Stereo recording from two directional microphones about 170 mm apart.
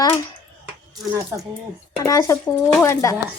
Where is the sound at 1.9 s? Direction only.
20° left (ahead or behind).